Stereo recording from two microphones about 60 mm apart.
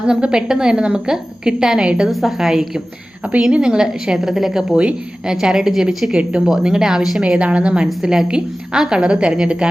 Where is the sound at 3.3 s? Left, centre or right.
Centre.